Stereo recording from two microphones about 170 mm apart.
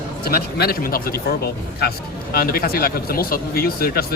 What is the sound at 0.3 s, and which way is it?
Speech, 65° left (ahead or behind).